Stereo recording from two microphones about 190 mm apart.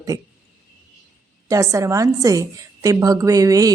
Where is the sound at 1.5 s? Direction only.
15° right (ahead or behind).